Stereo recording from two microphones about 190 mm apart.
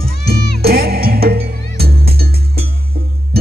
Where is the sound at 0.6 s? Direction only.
55° right (ahead or behind).